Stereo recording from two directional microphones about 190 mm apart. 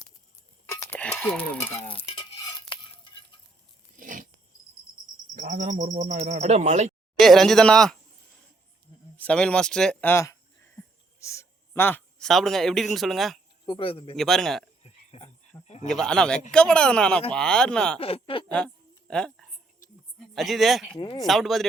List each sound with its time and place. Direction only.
0.9 s stir: 5° left (ahead or behind)
1.7 s stir: 30° left (ahead or behind)
3.9 s biting: 45° right (ahead or behind)
5.3 s speech: 45° right (ahead or behind)
7.2 s speech: centre (ahead or behind)
9.1 s a man's voice: 5° left (ahead or behind)
13.7 s a man's voice: 30° left (ahead or behind)
14.2 s speech: centre (ahead or behind)
14.8 s a sound: 35° left (ahead or behind)
15.9 s speech: 5° left (ahead or behind)
18.0 s a man's voice: 30° left (ahead or behind)
18.5 s a sound: 5° left (ahead or behind)
20.1 s speech: centre (ahead or behind)